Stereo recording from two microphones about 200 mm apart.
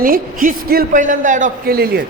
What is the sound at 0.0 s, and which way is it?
A man's voice, 45° right (ahead or behind).